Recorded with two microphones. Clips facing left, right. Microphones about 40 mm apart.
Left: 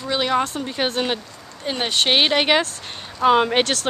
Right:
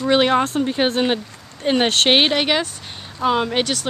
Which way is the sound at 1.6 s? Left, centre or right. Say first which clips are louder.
Right 7 dB; right.